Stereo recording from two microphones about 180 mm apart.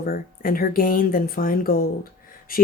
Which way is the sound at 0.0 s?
50° left (ahead or behind).